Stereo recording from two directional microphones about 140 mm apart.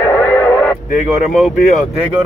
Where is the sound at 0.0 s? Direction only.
15° left (ahead or behind).